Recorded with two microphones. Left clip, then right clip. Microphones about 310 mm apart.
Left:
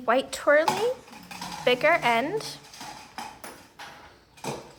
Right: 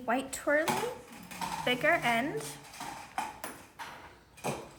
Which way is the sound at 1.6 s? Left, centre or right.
Centre.